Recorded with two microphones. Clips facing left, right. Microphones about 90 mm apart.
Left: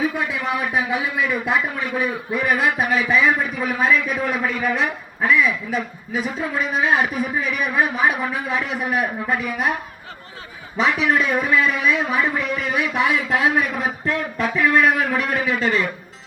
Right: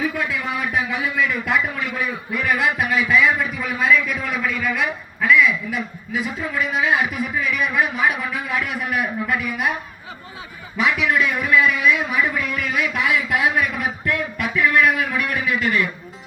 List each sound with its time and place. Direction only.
0.0 s a man's voice: 20° left (ahead or behind)
10.8 s a man's voice: 30° left (ahead or behind)